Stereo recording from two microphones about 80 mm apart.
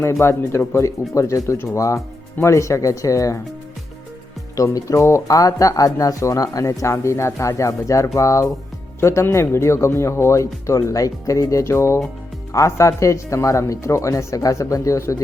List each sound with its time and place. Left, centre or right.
0.0 s speech: left
4.5 s speech: left